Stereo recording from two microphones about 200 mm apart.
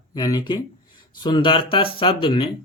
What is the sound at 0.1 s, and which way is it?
Speech, 20° left (ahead or behind).